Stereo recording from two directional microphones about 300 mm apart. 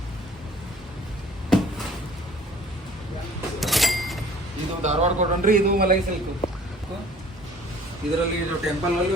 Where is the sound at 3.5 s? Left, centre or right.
Centre.